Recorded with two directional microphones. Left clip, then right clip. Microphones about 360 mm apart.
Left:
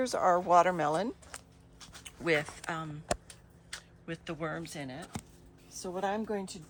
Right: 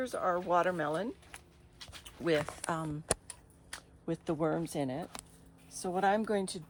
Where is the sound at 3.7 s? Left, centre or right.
Centre.